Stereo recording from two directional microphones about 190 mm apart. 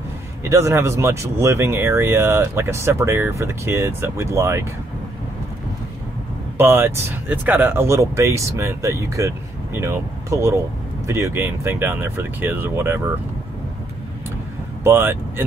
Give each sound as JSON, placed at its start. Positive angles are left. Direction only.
{"t": 0.4, "sound": "speech", "side_deg": -15}
{"t": 6.6, "sound": "speech", "side_deg": -10}
{"t": 14.8, "sound": "speech", "side_deg": -15}